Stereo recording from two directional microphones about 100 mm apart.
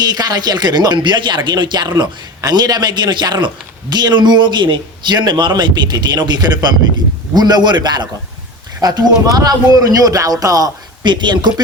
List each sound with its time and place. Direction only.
0.0 s a man's voice: 40° right (ahead or behind)